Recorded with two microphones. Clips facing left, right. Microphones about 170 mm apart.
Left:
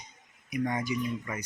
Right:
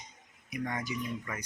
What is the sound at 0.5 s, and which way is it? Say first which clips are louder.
Speech: left 5 dB; 15° left (ahead or behind).